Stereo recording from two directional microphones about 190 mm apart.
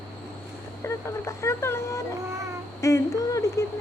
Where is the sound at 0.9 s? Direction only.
15° left (ahead or behind).